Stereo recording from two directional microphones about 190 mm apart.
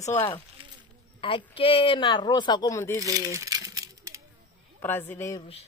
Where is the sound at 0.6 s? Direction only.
25° right (ahead or behind).